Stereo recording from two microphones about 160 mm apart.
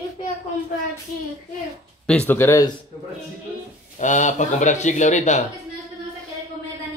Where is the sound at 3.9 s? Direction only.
50° left (ahead or behind).